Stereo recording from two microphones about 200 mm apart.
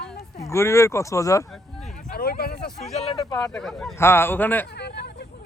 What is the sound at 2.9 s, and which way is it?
Speech, 30° left (ahead or behind).